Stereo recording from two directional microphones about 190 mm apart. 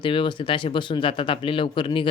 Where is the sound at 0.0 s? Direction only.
25° left (ahead or behind).